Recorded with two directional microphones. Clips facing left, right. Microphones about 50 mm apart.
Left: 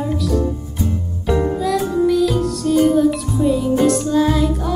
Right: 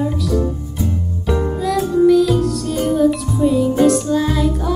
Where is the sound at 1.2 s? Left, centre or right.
Centre.